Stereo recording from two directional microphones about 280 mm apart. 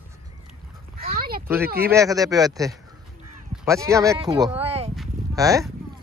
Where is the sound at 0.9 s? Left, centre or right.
Right.